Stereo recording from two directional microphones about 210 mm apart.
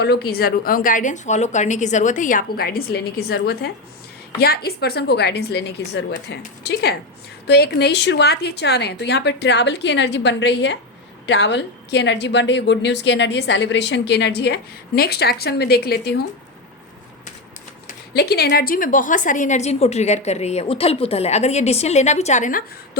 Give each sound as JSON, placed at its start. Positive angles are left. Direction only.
{"t": 0.0, "sound": "a woman's voice", "side_deg": 50}
{"t": 17.8, "sound": "a woman's voice", "side_deg": 50}